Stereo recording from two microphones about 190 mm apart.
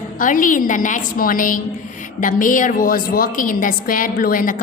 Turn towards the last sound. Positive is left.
turn(degrees=45)  # may be behind; listen again after turning